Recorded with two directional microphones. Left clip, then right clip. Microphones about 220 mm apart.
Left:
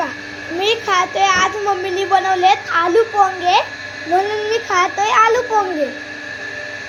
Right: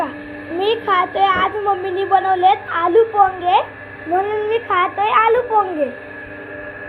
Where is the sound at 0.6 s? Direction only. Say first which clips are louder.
Even; 10° left (ahead or behind).